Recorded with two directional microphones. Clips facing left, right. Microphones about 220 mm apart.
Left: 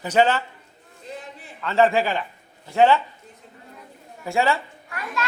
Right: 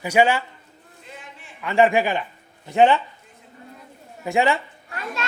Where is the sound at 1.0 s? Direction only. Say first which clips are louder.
Left 6 dB; 40° left (ahead or behind).